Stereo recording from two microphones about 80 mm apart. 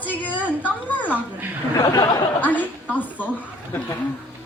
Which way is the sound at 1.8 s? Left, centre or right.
Left.